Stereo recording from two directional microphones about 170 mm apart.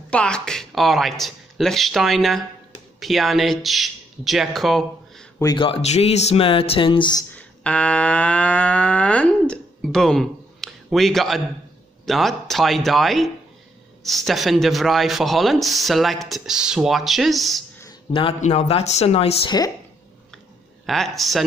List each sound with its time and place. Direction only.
0.1 s speech: 5° left (ahead or behind)
5.4 s speech: 25° left (ahead or behind)
7.3 s a sound: 5° left (ahead or behind)
12.1 s speech: centre (ahead or behind)
18.1 s speech: 35° left (ahead or behind)
20.8 s speech: centre (ahead or behind)